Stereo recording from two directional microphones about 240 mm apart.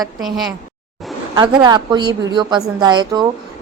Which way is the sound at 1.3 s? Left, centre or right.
Centre.